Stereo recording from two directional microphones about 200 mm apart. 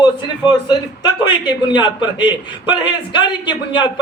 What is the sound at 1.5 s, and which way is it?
A man's voice, 20° left (ahead or behind).